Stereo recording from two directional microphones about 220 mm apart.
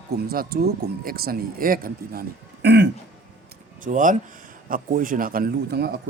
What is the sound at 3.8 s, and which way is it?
Speech, 35° right (ahead or behind).